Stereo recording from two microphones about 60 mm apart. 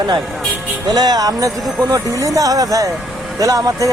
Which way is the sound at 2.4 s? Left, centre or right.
Right.